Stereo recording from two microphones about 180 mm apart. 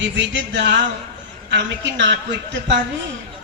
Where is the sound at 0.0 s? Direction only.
90° right.